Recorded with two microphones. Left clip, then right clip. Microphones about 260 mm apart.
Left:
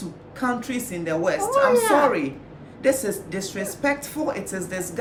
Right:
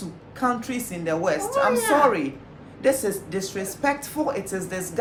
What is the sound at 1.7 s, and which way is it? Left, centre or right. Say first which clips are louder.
Speech: left 2 dB; centre.